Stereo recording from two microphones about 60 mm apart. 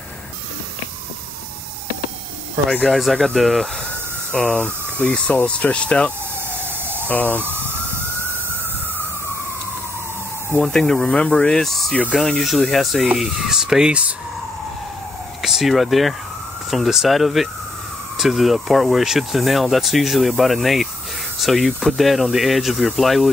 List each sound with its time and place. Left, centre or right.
2.9 s speech: centre
4.3 s speech: centre
6.6 s emergency vehicle: right
7.1 s speech: left
7.3 s police car: right
10.6 s speech: centre
12.2 s speech: centre
15.4 s speech: centre